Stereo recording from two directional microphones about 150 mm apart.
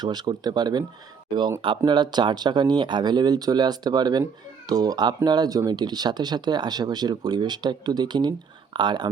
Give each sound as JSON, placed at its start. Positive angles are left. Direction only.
{"t": 0.0, "sound": "speech", "side_deg": -30}